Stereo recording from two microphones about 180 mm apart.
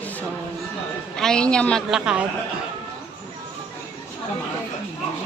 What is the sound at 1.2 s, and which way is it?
A woman's voice, 5° left (ahead or behind).